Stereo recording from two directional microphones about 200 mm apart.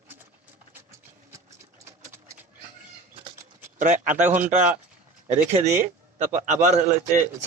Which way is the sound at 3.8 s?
40° right (ahead or behind).